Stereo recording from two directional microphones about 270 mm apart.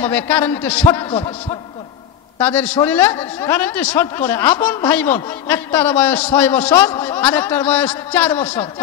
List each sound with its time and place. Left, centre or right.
0.0 s a man's voice: centre
2.3 s a man's voice: centre